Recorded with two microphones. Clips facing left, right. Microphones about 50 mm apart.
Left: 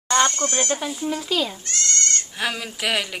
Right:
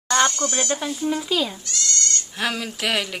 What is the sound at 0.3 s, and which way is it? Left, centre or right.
Speech, left.